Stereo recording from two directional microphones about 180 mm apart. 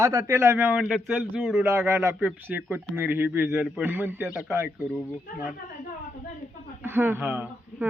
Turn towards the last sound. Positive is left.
turn(degrees=-10)  # may be behind; listen again after turning